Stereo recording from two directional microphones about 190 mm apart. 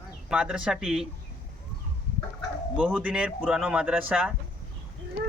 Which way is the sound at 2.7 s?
5° right (ahead or behind).